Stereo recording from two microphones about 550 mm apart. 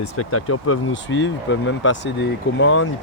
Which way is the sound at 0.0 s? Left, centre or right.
Left.